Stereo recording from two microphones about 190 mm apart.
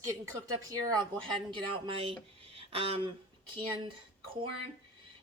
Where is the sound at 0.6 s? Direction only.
20° right (ahead or behind).